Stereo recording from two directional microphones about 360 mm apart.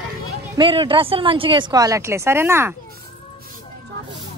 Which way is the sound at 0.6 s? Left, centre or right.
Centre.